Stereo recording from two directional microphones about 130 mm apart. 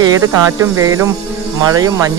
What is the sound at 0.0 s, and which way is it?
Speech, 25° right (ahead or behind).